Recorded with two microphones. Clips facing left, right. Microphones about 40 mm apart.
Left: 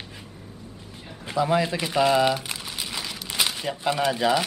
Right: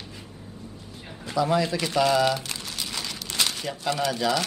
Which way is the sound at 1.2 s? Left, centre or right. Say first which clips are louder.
Left 1 dB; left.